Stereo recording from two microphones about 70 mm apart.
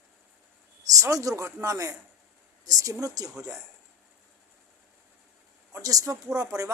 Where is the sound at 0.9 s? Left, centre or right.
Right.